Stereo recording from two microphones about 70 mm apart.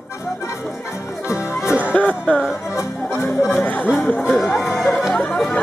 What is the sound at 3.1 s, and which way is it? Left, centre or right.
Music, centre.